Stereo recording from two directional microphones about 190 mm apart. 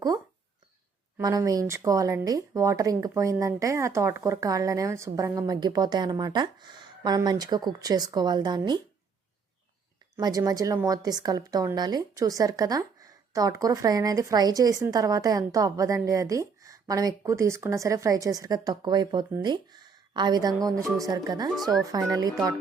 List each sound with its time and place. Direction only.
1.2 s a woman's voice: 20° right (ahead or behind)
10.2 s a woman's voice: 20° right (ahead or behind)
21.5 s speech: centre (ahead or behind)